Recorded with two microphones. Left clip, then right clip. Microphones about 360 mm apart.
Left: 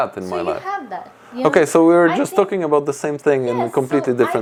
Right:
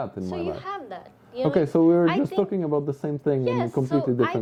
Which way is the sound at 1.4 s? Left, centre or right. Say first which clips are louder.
Left 7 dB; centre.